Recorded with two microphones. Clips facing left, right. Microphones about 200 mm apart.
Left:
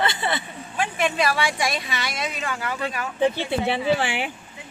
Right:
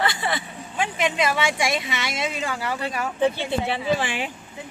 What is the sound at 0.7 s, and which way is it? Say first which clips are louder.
Speech: even; 20° right (ahead or behind).